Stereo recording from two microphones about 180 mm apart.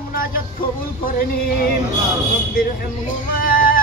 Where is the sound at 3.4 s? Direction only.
55° left (ahead or behind).